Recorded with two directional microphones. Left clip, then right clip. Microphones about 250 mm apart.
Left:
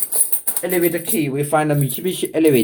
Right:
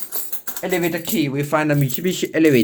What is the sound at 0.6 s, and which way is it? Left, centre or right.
Speech, right.